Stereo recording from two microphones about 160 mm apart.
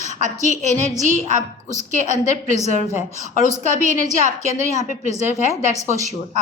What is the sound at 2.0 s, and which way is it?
Speech, 45° left (ahead or behind).